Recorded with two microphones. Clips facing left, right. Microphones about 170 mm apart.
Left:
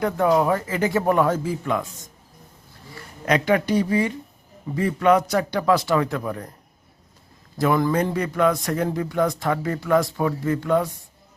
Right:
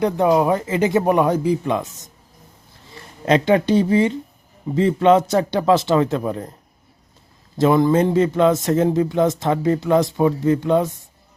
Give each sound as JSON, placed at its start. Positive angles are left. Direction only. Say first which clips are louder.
{"t": 0.0, "sound": "a man's voice", "louder": "right 3 dB", "side_deg": -20}
{"t": 2.9, "sound": "a man's voice", "louder": "right 4 dB", "side_deg": -25}
{"t": 7.6, "sound": "a man's voice", "louder": "right 5 dB", "side_deg": -25}